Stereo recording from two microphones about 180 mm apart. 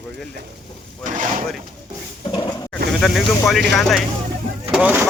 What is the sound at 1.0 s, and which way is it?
Speech, 45° right (ahead or behind).